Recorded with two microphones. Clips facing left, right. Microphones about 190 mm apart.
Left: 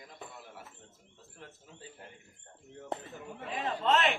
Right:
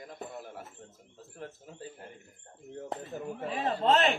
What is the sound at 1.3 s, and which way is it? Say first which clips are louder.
Bird: right 8 dB; 45° right (ahead or behind).